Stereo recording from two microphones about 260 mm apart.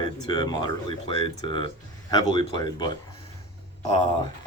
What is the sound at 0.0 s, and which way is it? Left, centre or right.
Speech, centre.